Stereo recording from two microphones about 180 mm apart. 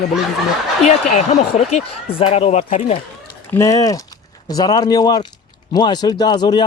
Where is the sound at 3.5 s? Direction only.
15° left (ahead or behind).